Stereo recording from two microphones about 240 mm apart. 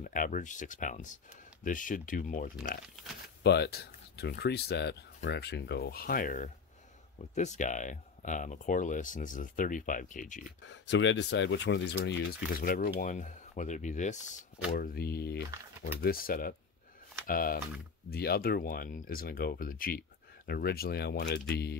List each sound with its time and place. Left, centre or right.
0.0 s speech: left
10.6 s speech: left
14.7 s speech: left